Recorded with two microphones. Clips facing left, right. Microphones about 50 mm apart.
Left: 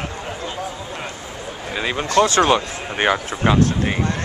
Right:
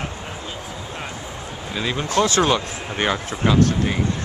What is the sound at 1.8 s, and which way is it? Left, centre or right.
Speech, centre.